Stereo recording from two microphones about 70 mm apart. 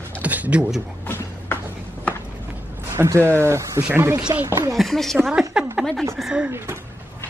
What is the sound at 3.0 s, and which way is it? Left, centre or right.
Speech, right.